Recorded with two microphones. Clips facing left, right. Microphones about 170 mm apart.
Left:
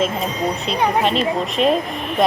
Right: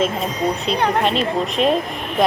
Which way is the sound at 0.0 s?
Centre (ahead or behind).